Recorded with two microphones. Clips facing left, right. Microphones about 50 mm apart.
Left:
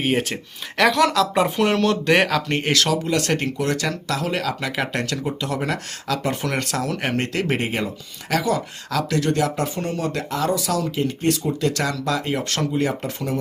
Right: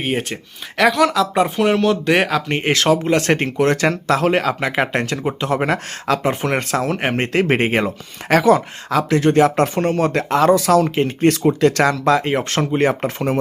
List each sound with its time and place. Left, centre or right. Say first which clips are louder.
0.0 s speech: even; centre
2.6 s speech: right 8 dB; right
8.9 s speech: right 6 dB; right
9.6 s speech: right 8 dB; right
12.7 s speech: right 6 dB; right